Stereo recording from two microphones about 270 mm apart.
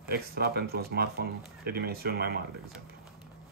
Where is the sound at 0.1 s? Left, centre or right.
Right.